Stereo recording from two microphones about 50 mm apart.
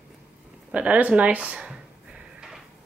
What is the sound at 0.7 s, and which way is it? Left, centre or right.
Speech, right.